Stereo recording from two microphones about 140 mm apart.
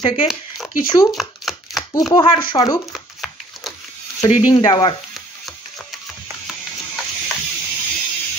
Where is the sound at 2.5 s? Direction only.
25° left (ahead or behind).